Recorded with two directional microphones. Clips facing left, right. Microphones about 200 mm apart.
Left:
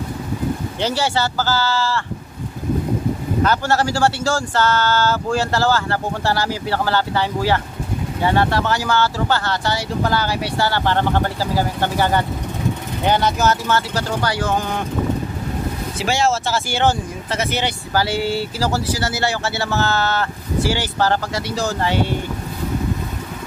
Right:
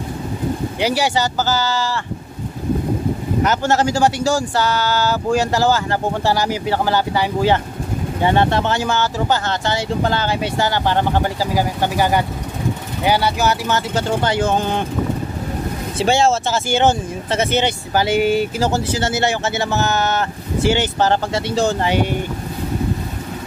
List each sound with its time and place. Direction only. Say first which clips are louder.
0.7 s speech: right 2 dB; 15° right (ahead or behind)
3.4 s speech: right 2 dB; 20° right (ahead or behind)
16.0 s speech: right 4 dB; 30° right (ahead or behind)
21.8 s speech: right 2 dB; 15° right (ahead or behind)